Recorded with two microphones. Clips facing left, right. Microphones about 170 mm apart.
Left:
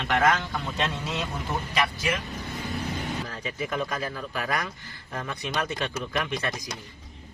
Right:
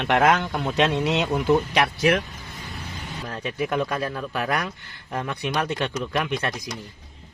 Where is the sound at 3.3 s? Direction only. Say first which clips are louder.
Right 5 dB; 70° right (ahead or behind).